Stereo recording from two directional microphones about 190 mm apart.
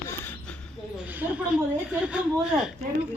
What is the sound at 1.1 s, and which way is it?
A woman's voice, 10° right (ahead or behind).